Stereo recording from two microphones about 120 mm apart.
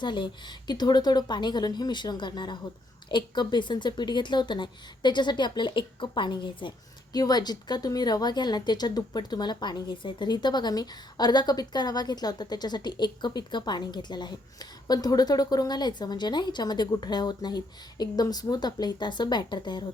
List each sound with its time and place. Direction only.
0.0 s a woman's voice: 40° left (ahead or behind)